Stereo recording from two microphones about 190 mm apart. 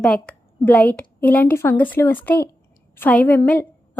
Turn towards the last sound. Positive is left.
turn(degrees=10)  # may be behind; listen again after turning